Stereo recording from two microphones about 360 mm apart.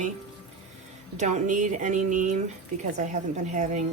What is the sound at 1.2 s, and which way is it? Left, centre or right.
Speech, right.